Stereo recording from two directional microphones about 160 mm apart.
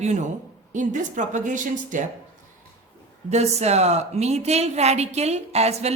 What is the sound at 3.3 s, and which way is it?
A woman's voice, 45° right (ahead or behind).